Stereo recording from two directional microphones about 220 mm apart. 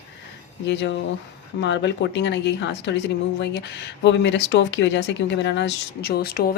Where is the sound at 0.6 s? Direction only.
55° left (ahead or behind).